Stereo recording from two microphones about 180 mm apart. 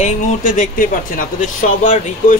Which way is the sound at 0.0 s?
45° left (ahead or behind).